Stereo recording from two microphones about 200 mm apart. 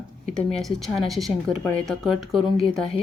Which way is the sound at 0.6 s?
Centre (ahead or behind).